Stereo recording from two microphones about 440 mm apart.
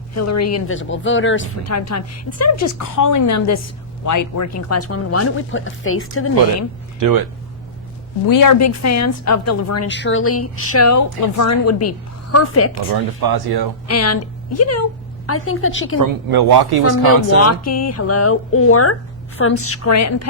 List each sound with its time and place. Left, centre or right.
0.1 s speech: left
7.0 s speech: right
8.3 s speech: left
12.9 s speech: right
13.8 s a woman's voice: left
16.0 s speech: right
17.7 s speech: left